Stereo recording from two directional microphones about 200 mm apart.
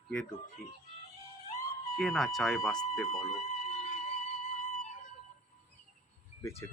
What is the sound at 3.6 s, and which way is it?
Music, 35° left (ahead or behind).